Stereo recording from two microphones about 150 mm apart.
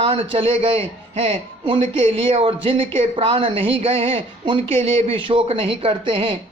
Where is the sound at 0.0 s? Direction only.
35° right (ahead or behind).